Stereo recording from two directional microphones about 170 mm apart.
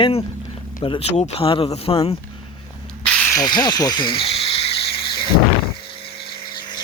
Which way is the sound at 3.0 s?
5° left (ahead or behind).